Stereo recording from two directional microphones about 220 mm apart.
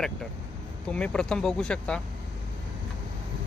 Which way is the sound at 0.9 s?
5° left (ahead or behind).